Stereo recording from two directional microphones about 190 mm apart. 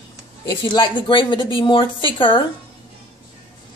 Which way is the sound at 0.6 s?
25° left (ahead or behind).